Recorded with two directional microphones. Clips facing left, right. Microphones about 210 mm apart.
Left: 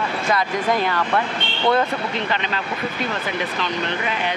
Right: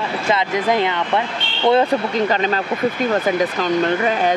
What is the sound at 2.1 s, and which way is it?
Speech, 40° right (ahead or behind).